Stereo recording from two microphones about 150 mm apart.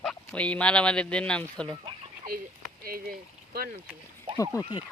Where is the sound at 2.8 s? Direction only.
80° right.